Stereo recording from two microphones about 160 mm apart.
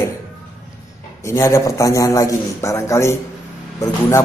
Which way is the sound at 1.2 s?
20° left (ahead or behind).